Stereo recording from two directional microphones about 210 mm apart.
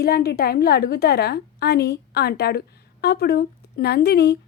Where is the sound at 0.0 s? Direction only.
50° left (ahead or behind).